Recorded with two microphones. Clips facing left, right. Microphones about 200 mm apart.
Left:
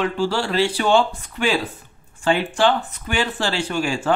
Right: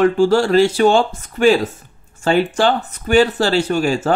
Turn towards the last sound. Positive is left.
turn(degrees=-40)  # may be behind; listen again after turning